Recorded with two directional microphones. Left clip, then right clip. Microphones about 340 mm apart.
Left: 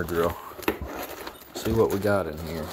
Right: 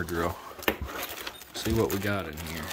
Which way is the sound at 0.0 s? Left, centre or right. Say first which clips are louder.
Left 5 dB; centre.